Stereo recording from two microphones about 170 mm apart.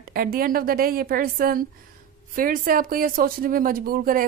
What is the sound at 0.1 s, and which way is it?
A woman's voice, 60° right (ahead or behind).